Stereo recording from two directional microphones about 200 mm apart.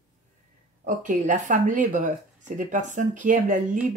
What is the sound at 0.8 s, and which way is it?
Speech, 40° right (ahead or behind).